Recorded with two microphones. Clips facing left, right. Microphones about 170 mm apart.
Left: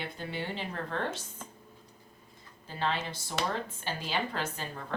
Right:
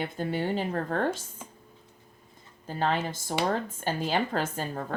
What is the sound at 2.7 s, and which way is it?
Speech, 45° right (ahead or behind).